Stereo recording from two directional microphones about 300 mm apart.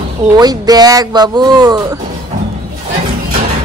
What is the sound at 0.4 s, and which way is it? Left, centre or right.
Speech, centre.